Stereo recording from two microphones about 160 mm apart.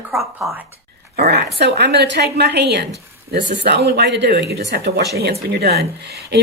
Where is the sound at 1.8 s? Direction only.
90° right.